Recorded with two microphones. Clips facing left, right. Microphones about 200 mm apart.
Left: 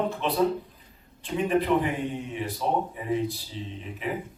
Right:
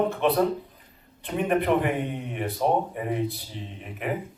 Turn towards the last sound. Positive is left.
turn(degrees=-60)  # may be behind; listen again after turning